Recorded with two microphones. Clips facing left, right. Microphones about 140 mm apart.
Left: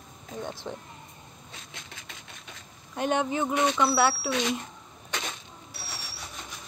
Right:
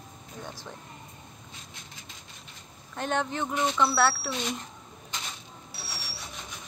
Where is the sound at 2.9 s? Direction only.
10° left (ahead or behind).